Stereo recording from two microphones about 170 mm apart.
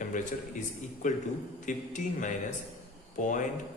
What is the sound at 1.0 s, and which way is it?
Speech, 45° left (ahead or behind).